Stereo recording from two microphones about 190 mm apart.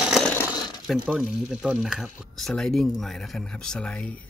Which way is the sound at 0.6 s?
20° left (ahead or behind).